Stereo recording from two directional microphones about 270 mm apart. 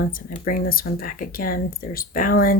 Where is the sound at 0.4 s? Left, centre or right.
Left.